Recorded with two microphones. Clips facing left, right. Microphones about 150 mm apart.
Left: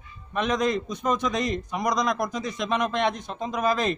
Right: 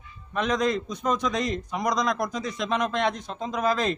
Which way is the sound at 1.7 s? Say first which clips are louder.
Even; centre (ahead or behind).